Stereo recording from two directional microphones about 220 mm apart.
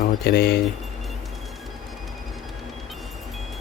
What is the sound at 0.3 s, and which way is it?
Speech, 45° left (ahead or behind).